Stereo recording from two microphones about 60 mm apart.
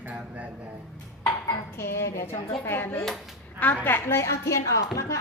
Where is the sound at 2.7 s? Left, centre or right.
Left.